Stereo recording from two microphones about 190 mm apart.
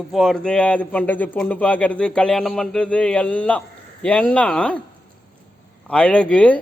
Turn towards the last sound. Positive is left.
turn(degrees=5)  # may be behind; listen again after turning